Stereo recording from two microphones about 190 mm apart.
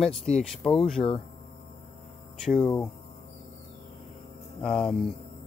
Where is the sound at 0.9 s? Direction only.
30° left (ahead or behind).